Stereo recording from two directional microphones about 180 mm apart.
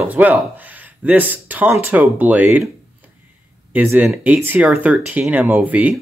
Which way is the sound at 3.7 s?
10° right (ahead or behind).